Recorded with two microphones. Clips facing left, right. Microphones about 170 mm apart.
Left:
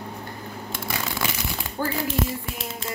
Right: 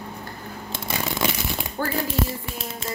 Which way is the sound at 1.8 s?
15° left (ahead or behind).